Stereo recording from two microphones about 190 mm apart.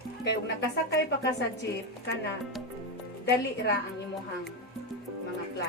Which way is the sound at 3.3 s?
60° left (ahead or behind).